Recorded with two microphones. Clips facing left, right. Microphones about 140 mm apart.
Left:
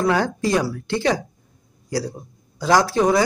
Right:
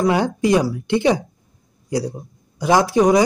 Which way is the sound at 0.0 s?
15° right (ahead or behind).